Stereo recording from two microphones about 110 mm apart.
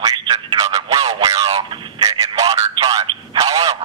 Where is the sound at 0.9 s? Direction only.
55° right (ahead or behind).